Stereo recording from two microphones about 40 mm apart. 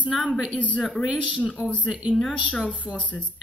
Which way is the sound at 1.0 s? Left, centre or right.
Right.